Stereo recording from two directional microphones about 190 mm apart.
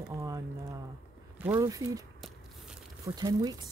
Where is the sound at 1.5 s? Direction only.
20° right (ahead or behind).